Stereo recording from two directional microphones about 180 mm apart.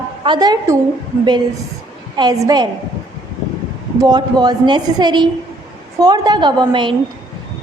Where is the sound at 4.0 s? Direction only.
25° right (ahead or behind).